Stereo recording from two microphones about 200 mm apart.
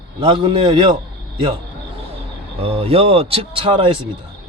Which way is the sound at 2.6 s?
30° right (ahead or behind).